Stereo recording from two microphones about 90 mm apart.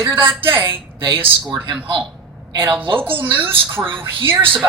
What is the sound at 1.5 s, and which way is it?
A man's voice, 60° right (ahead or behind).